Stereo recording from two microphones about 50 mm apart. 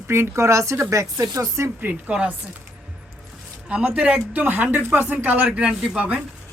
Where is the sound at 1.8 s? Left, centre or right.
Right.